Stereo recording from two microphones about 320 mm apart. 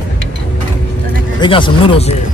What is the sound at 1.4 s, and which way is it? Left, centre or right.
Speech, centre.